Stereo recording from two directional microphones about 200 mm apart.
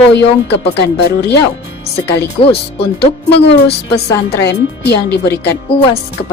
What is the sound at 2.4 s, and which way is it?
Speech, 30° left (ahead or behind).